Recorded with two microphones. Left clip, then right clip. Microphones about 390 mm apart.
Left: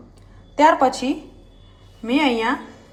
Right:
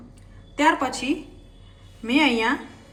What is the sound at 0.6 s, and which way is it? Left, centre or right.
A woman's voice, centre.